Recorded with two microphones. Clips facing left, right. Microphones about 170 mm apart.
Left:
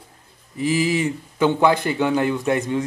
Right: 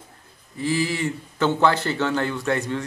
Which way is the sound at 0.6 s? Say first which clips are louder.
Left 4 dB; 20° left (ahead or behind).